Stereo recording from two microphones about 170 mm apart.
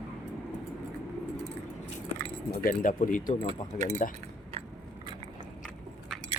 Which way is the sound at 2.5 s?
55° left (ahead or behind).